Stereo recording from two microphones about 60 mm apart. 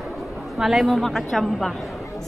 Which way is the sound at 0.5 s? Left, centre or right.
Centre.